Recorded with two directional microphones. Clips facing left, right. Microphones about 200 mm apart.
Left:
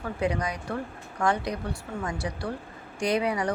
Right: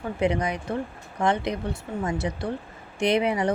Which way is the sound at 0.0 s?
20° right (ahead or behind).